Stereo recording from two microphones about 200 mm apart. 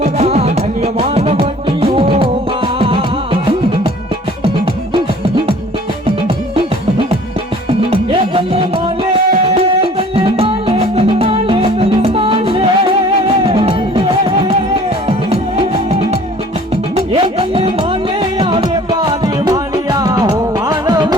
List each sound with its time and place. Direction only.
0.0 s music: 30° right (ahead or behind)
9.6 s music: 30° right (ahead or behind)
16.9 s music: 30° right (ahead or behind)